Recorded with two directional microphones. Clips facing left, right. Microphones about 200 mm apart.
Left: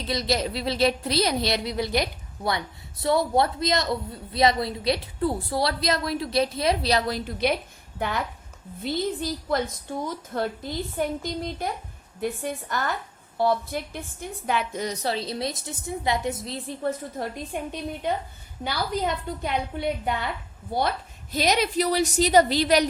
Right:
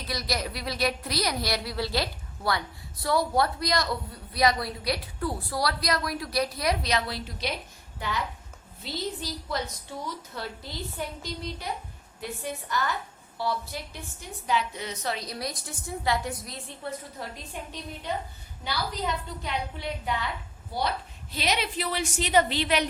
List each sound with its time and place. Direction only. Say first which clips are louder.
0.1 s a woman's voice: left 6 dB; 25° left (ahead or behind)
7.1 s a woman's voice: left 8 dB; 55° left (ahead or behind); by 16.6 s 25° left (ahead or behind)
16.8 s a woman's voice: left 7 dB; 50° left (ahead or behind)
21.3 s a woman's voice: left 7 dB; 40° left (ahead or behind)